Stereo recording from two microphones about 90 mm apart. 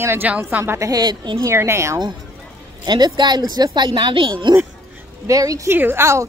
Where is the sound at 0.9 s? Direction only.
50° right (ahead or behind).